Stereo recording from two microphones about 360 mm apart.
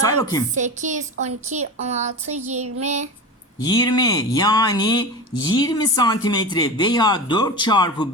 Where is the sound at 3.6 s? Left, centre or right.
Centre.